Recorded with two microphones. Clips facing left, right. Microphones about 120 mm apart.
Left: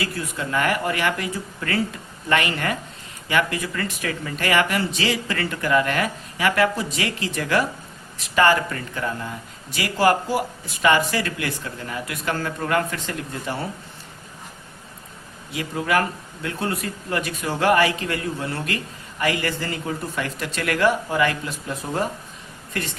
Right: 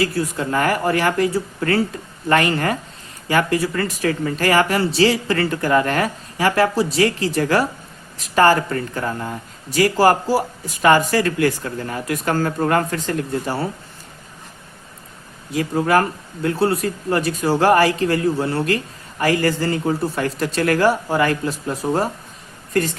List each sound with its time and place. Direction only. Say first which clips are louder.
0.0 s speech: right 7 dB; 35° right (ahead or behind)
15.5 s a woman's voice: right 5 dB; 40° right (ahead or behind)